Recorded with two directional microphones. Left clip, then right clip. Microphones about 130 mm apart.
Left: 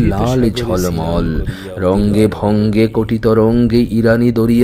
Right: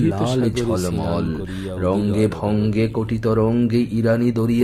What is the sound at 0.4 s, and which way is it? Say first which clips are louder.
Speech: left 5 dB; 40° left (ahead or behind).